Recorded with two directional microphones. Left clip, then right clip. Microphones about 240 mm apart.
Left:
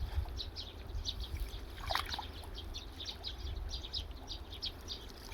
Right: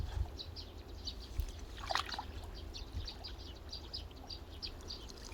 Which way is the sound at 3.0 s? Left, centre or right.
Right.